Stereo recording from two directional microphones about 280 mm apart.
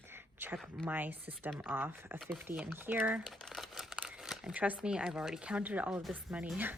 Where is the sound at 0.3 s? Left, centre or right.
Centre.